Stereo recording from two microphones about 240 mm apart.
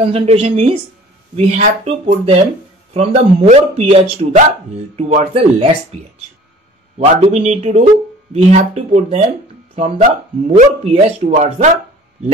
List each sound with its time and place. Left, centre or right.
0.0 s speech: right